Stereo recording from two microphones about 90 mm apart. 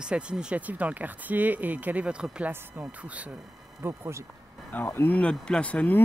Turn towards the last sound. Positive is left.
turn(degrees=15)  # may be behind; listen again after turning